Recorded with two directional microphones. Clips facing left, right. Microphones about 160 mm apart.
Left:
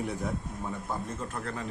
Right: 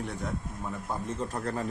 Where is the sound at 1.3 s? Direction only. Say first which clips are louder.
Right 4 dB; 40° right (ahead or behind).